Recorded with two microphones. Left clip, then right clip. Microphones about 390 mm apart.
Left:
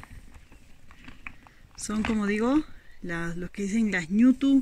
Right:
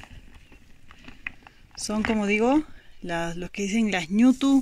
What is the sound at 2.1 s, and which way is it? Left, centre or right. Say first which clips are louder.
Speech: right 4 dB; centre.